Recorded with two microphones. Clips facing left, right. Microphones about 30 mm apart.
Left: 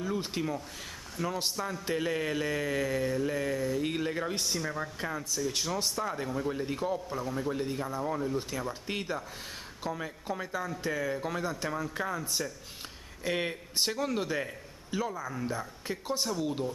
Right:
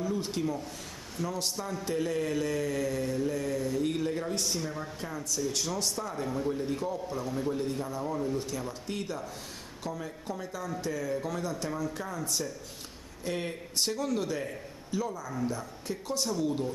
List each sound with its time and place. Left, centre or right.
0.0 s a man's voice: left
6.5 s a man's voice: left
7.2 s a man's voice: centre